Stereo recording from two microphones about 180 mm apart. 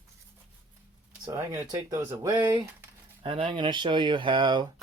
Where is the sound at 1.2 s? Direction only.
10° right (ahead or behind).